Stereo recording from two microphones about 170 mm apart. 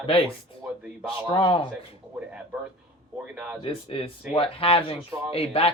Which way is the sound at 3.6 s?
30° left (ahead or behind).